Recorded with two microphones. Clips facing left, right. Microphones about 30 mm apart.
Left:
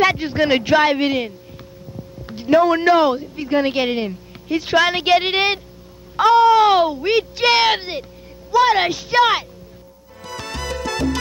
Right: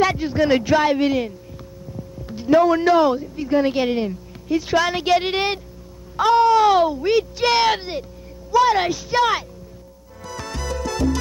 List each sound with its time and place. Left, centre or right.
0.0 s speech: left
10.2 s music: left